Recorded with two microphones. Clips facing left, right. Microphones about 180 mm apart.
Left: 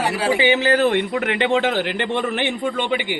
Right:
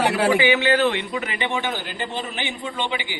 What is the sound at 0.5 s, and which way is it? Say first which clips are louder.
Speech: left 2 dB; 40° left (ahead or behind).